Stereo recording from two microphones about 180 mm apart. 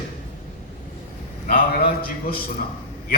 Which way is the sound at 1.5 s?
55° left (ahead or behind).